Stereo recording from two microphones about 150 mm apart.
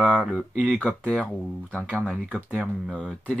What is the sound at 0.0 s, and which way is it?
Speech, 5° left (ahead or behind).